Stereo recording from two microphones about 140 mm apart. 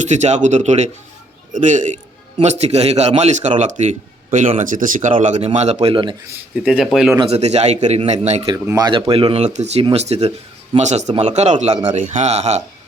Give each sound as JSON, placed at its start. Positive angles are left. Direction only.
{"t": 0.1, "sound": "speech", "side_deg": -55}
{"t": 2.4, "sound": "speech", "side_deg": -55}
{"t": 5.2, "sound": "speech", "side_deg": -55}
{"t": 5.9, "sound": "speech", "side_deg": -35}
{"t": 6.6, "sound": "speech", "side_deg": -5}
{"t": 7.3, "sound": "speech", "side_deg": -50}
{"t": 8.5, "sound": "speech", "side_deg": -20}
{"t": 8.8, "sound": "speech", "side_deg": -30}